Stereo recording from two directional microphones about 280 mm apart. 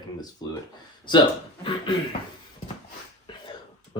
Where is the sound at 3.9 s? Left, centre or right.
Centre.